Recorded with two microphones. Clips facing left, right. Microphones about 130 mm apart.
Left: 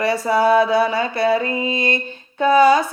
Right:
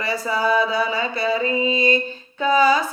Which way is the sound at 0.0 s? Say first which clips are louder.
Left 6 dB; 60° left (ahead or behind).